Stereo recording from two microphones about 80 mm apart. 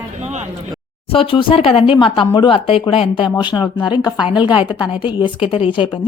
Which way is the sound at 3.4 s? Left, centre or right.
Left.